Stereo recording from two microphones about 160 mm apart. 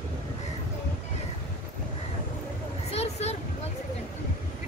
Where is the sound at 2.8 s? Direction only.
40° left (ahead or behind).